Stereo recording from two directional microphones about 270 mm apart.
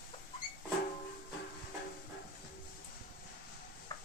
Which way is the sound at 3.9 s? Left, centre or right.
Centre.